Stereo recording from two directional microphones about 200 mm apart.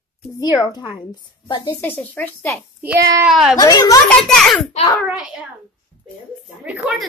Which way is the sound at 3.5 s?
20° left (ahead or behind).